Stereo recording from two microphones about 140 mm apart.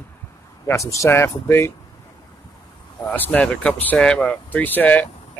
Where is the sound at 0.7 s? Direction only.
20° left (ahead or behind).